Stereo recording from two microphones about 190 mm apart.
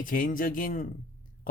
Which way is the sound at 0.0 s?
45° left (ahead or behind).